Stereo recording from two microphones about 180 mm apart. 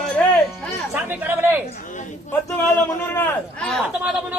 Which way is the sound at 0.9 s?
10° right (ahead or behind).